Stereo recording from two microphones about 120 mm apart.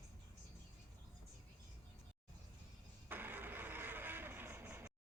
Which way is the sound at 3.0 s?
15° right (ahead or behind).